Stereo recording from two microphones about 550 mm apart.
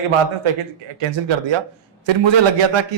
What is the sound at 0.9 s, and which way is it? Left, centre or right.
A man's voice, right.